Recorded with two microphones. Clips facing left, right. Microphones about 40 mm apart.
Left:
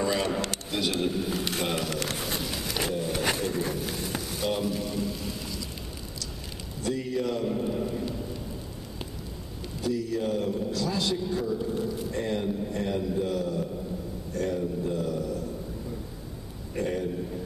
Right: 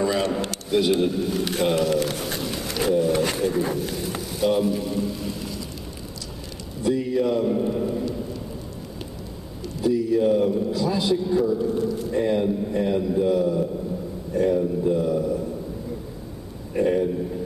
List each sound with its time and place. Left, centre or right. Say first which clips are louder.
0.0 s a sound: right 4 dB; centre
0.7 s a man's voice: right 10 dB; centre
2.0 s pigeon: right 4 dB; centre
2.7 s roaring cats: right 10 dB; centre
3.3 s a man's voice: right 6 dB; centre
6.8 s a man's voice: right 7 dB; centre
9.8 s a man's voice: right 8 dB; centre
16.7 s a man's voice: right 8 dB; centre